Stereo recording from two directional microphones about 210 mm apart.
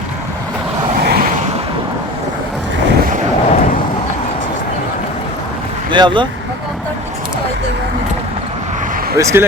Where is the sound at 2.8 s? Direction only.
55° right (ahead or behind).